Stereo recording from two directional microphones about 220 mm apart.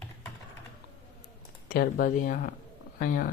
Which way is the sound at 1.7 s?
40° left (ahead or behind).